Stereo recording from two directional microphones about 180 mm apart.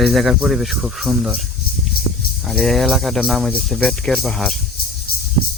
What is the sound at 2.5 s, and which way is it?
Speech, centre (ahead or behind).